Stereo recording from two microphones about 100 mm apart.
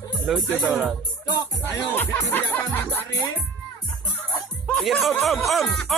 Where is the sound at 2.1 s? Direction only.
30° left (ahead or behind).